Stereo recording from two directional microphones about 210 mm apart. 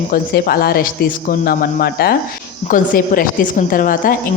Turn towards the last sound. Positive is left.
turn(degrees=40)  # may be behind; listen again after turning